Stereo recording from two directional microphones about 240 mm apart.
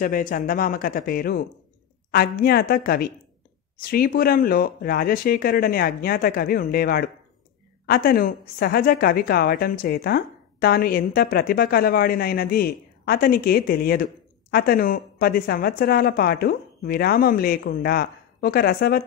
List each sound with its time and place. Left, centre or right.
0.0 s a woman's voice: left